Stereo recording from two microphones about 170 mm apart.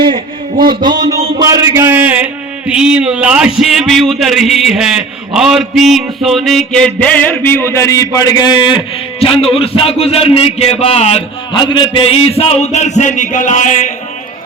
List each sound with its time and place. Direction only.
0.7 s a man's voice: 25° right (ahead or behind)
1.2 s a sound: 25° right (ahead or behind); by 3.5 s 5° right (ahead or behind)
3.6 s a man's voice: centre (ahead or behind); by 13.9 s 45° left (ahead or behind)